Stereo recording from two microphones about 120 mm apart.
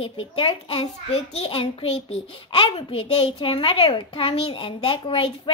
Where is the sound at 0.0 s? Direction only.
50° left (ahead or behind).